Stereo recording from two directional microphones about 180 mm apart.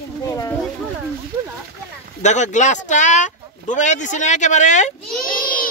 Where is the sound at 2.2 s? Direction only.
40° left (ahead or behind).